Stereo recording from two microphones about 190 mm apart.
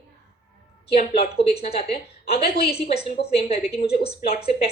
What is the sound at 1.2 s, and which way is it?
A woman's voice, 30° left (ahead or behind).